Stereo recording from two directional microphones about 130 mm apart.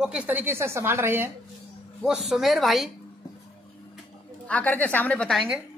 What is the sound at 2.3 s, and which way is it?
Speech, centre (ahead or behind).